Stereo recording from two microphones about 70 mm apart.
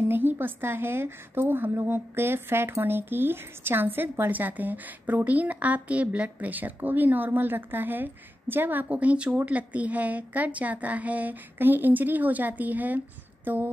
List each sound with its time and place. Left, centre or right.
0.0 s a woman's voice: right